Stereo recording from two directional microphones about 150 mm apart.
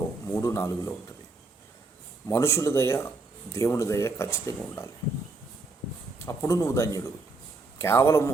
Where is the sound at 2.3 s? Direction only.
20° left (ahead or behind).